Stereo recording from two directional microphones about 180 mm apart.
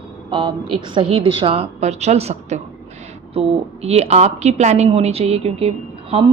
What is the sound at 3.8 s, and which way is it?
A woman's voice, 35° right (ahead or behind).